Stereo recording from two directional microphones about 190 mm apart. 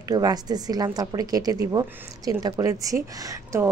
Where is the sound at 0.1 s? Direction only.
20° right (ahead or behind).